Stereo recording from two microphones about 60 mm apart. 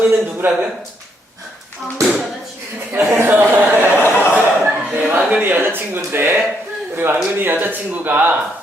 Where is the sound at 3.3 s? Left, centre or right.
Right.